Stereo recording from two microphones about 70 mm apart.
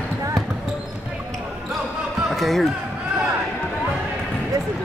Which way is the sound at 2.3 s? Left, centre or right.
Centre.